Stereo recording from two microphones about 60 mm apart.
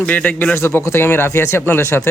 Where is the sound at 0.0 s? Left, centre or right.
Left.